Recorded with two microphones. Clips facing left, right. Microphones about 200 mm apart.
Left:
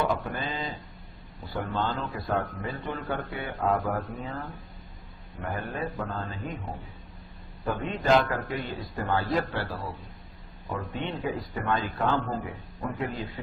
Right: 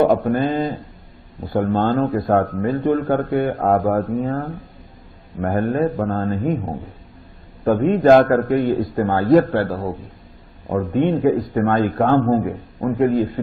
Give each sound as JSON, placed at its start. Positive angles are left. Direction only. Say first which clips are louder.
{"t": 0.3, "sound": "a man's voice", "louder": "right 14 dB", "side_deg": -50}